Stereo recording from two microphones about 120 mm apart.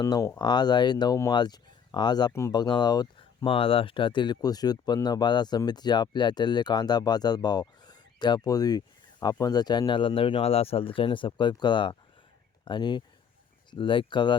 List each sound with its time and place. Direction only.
0.0 s speech: 25° left (ahead or behind)